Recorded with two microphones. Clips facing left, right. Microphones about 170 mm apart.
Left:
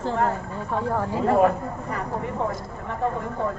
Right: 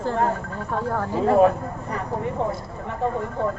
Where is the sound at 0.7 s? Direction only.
Centre (ahead or behind).